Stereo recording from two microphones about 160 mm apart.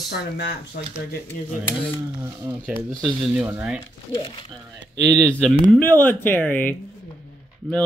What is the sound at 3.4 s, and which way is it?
Speech, 10° right (ahead or behind).